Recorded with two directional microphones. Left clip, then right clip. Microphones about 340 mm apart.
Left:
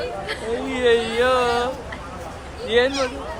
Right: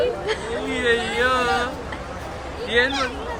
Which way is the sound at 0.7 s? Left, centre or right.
Centre.